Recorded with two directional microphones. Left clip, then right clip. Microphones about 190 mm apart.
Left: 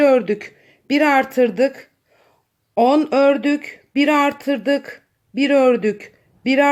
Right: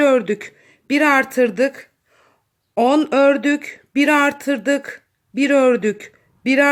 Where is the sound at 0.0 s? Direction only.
10° right (ahead or behind).